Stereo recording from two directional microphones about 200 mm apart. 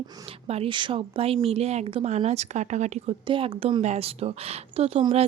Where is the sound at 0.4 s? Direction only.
30° right (ahead or behind).